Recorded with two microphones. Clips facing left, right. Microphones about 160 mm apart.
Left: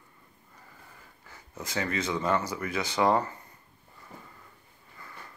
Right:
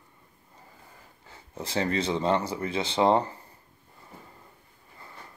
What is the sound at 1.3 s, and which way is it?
Speech, 30° right (ahead or behind).